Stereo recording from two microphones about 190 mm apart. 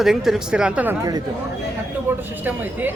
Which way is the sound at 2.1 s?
10° right (ahead or behind).